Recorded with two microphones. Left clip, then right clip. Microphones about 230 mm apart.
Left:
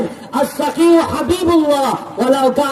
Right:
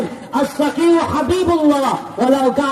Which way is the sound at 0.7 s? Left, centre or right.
Left.